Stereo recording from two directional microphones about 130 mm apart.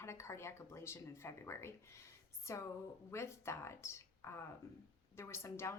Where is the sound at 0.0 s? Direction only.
20° left (ahead or behind).